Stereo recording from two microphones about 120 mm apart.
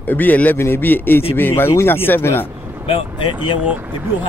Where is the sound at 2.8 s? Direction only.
50° left (ahead or behind).